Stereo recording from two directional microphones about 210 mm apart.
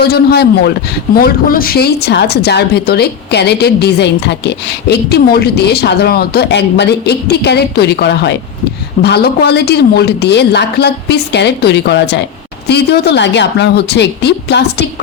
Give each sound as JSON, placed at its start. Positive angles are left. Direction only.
{"t": 0.0, "sound": "speech", "side_deg": 50}